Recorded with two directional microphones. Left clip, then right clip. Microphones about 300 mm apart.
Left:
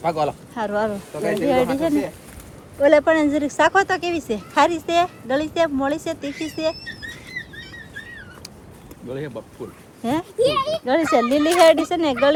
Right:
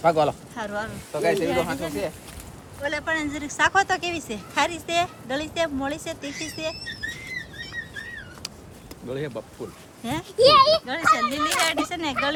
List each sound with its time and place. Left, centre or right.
0.0 s speech: right
0.5 s speech: centre
1.2 s speech: centre
1.5 s speech: centre
7.4 s bird: right
9.0 s speech: centre